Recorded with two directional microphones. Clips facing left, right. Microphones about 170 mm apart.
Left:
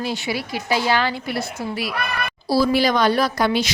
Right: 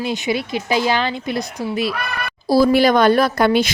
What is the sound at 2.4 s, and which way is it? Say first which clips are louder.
A woman's voice: right 5 dB; 50° right (ahead or behind).